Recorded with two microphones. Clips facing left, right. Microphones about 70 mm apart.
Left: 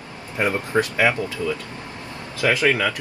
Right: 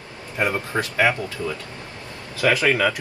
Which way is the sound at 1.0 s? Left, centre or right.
Right.